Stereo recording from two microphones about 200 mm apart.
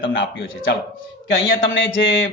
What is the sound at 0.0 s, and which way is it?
A man's voice, 70° left (ahead or behind).